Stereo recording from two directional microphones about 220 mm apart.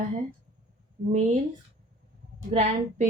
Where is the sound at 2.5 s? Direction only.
30° right (ahead or behind).